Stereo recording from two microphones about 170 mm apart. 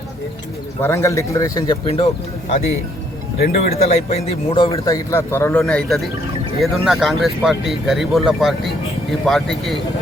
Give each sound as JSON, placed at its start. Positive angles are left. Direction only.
{"t": 0.8, "sound": "speech", "side_deg": 15}
{"t": 3.3, "sound": "speech", "side_deg": 65}
{"t": 3.8, "sound": "speech", "side_deg": 40}
{"t": 4.7, "sound": "speech", "side_deg": 15}
{"t": 5.6, "sound": "speech", "side_deg": 5}